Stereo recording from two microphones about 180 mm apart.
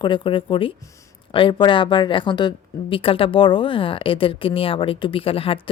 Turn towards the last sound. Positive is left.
turn(degrees=30)  # may be behind; listen again after turning